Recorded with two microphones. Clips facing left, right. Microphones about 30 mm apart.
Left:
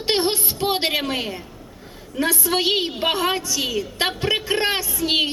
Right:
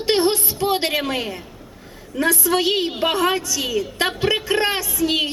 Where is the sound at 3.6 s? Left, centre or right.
Centre.